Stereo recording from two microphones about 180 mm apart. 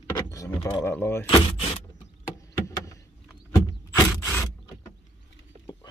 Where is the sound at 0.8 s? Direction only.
15° left (ahead or behind).